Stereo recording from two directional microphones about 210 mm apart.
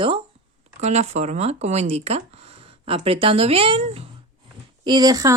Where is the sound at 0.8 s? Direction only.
30° right (ahead or behind).